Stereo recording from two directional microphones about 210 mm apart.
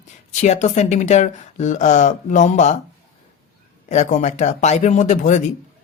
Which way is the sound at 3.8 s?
35° left (ahead or behind).